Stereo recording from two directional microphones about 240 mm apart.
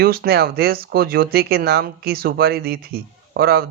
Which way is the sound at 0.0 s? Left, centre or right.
Right.